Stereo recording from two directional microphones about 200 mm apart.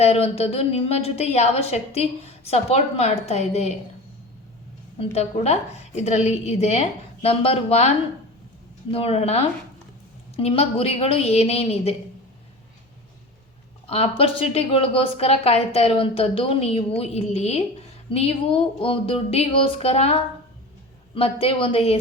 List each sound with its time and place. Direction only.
0.0 s a woman's voice: 30° left (ahead or behind)
4.9 s a woman's voice: 30° left (ahead or behind)
13.8 s a woman's voice: 30° left (ahead or behind)
21.2 s a woman's voice: 30° left (ahead or behind)